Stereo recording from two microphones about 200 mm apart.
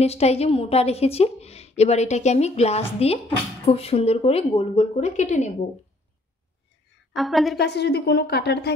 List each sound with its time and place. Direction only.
0.0 s a woman's voice: 30° left (ahead or behind)
7.2 s a woman's voice: centre (ahead or behind)
7.5 s speech: 55° left (ahead or behind)